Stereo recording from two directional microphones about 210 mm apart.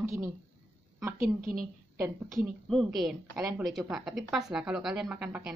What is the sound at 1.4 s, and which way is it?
Speech, 40° right (ahead or behind).